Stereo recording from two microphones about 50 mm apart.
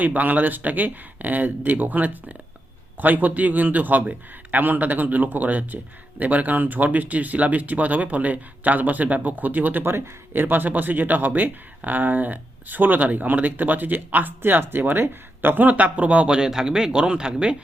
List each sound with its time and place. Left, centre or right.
0.0 s a man's voice: right
9.8 s a man's voice: right; by 17.6 s centre